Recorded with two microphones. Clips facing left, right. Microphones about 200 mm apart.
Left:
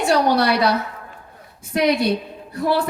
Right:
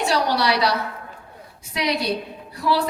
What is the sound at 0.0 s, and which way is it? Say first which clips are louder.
Speech: left 4 dB; 50° left (ahead or behind).